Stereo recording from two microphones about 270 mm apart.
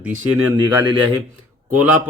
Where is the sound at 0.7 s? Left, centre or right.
Centre.